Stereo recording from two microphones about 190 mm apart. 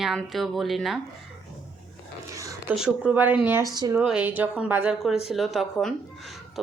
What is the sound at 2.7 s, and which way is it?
Speech, 5° right (ahead or behind).